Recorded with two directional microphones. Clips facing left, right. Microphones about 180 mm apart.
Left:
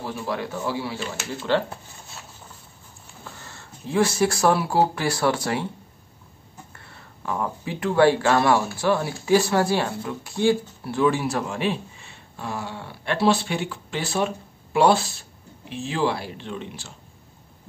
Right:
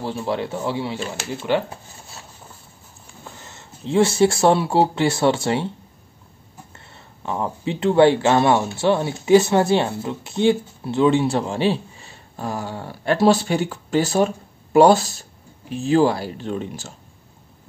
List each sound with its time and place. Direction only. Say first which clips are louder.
0.0 s speech: right 4 dB; 30° right (ahead or behind)
3.3 s speech: right 1 dB; 20° right (ahead or behind)
6.9 s speech: right 2 dB; 25° right (ahead or behind); by 16.9 s 40° right (ahead or behind)